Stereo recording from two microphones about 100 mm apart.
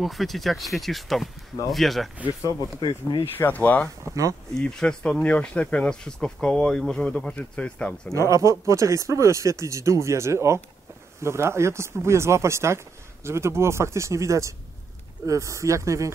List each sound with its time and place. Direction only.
0.0 s speech: centre (ahead or behind)
2.8 s speech: 50° left (ahead or behind)
3.3 s speech: 20° left (ahead or behind)
4.0 s speech: 35° right (ahead or behind)
4.6 s speech: 5° left (ahead or behind)
8.1 s speech: 30° right (ahead or behind)